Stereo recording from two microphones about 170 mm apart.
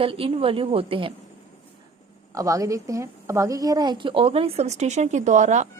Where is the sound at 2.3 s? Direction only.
20° right (ahead or behind).